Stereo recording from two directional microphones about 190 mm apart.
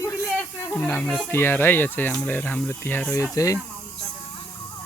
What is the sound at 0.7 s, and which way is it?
Speech, 10° left (ahead or behind).